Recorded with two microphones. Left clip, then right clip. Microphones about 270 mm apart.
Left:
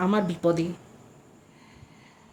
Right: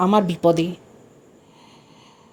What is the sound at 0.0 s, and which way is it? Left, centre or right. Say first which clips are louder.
Speech: right 7 dB; right.